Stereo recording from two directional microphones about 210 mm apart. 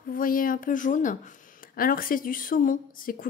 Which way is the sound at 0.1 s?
40° left (ahead or behind).